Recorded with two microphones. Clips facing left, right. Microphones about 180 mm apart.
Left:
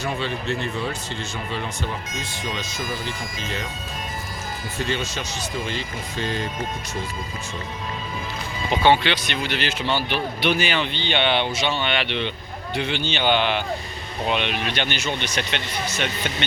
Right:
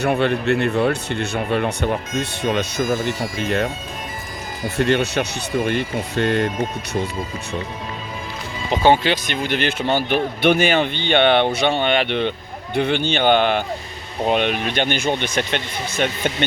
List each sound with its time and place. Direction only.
0.0 s speech: 60° right (ahead or behind)
4.8 s speech: 65° right (ahead or behind)
8.8 s speech: 45° right (ahead or behind)